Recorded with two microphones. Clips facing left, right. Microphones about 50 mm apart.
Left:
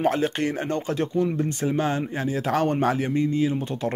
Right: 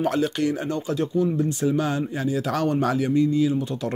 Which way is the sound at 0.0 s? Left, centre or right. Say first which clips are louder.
Even; left.